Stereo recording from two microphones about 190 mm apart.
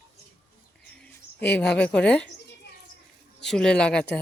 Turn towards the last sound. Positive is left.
turn(degrees=5)  # may be behind; listen again after turning